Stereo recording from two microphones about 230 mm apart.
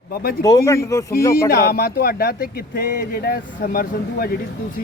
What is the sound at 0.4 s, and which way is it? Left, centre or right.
Speech, centre.